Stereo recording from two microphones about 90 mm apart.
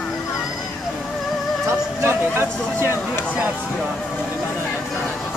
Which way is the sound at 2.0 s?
30° right (ahead or behind).